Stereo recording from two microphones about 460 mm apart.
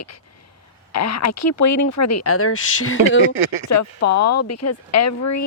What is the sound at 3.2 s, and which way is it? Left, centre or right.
Speech, right.